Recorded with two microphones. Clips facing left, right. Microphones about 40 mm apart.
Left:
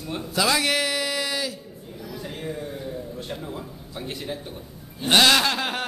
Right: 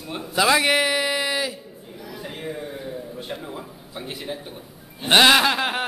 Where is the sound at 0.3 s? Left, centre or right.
Right.